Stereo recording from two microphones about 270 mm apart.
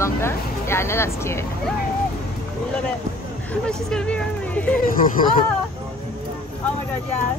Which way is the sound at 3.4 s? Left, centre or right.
Centre.